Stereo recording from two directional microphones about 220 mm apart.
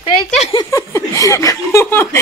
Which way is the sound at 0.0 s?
25° left (ahead or behind).